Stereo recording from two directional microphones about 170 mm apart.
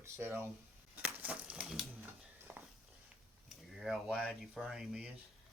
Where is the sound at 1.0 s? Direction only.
10° right (ahead or behind).